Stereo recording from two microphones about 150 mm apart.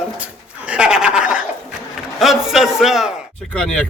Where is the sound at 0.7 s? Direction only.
5° right (ahead or behind).